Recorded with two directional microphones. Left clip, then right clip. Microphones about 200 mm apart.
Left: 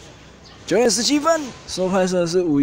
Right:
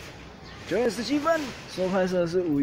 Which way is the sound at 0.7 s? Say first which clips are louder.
Left 9 dB; 35° left (ahead or behind).